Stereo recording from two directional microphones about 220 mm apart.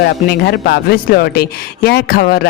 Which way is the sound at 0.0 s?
45° left (ahead or behind).